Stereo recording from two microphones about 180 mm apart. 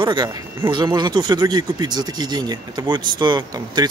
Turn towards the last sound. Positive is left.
turn(degrees=-25)  # may be behind; listen again after turning